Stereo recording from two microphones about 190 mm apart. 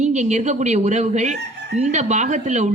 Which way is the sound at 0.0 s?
40° right (ahead or behind).